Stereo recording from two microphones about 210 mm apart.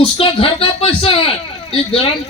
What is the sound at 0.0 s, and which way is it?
Speech, 25° left (ahead or behind).